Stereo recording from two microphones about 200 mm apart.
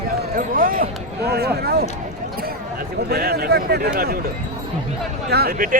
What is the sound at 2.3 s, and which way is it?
Speech, 50° right (ahead or behind).